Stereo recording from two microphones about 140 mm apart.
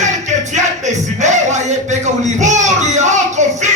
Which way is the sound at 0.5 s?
55° right (ahead or behind).